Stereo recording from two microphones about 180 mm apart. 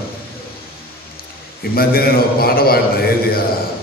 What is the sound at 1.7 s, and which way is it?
A man's voice, 55° left (ahead or behind).